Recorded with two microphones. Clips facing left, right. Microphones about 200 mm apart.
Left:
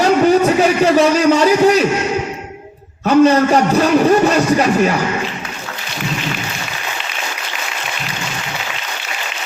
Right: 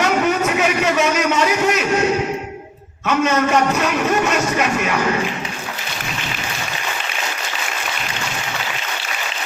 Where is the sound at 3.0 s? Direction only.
35° left (ahead or behind).